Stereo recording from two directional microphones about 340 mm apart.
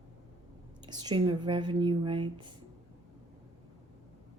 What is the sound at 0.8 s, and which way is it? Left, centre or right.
A woman's voice, centre.